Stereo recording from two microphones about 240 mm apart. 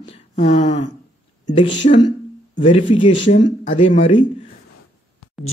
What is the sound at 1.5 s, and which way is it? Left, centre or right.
Speech, left.